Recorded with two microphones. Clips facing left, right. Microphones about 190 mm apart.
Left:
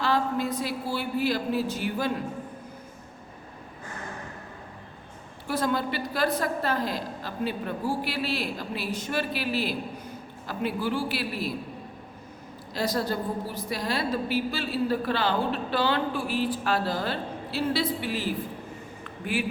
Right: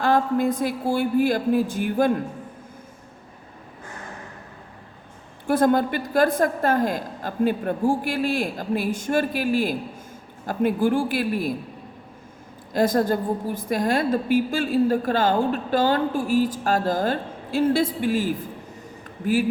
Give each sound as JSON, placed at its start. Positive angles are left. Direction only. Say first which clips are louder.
{"t": 0.0, "sound": "a woman's voice", "louder": "right 6 dB", "side_deg": -50}
{"t": 5.5, "sound": "a woman's voice", "louder": "right 8 dB", "side_deg": -50}
{"t": 12.7, "sound": "a woman's voice", "louder": "right 7 dB", "side_deg": -50}
{"t": 19.0, "sound": "a sound", "louder": "right 8 dB", "side_deg": -40}